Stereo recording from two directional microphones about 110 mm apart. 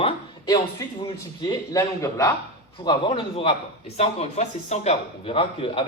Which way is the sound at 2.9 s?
50° left (ahead or behind).